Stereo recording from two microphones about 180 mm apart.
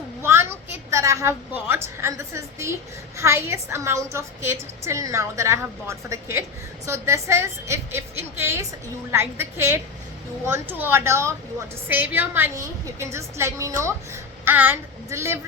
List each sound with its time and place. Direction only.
0.2 s a woman's voice: 15° right (ahead or behind)